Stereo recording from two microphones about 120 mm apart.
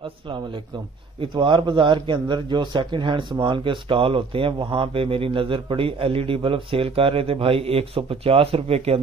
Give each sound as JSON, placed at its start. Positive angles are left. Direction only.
{"t": 1.2, "sound": "a man's voice", "side_deg": -45}